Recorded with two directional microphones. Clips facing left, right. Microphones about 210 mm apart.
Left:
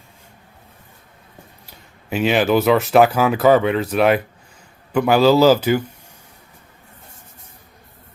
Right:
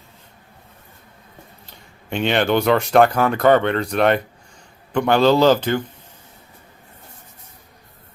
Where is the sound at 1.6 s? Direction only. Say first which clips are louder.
Left 2 dB; 5° left (ahead or behind).